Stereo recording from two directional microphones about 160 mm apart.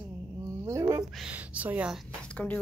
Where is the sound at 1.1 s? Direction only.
5° right (ahead or behind).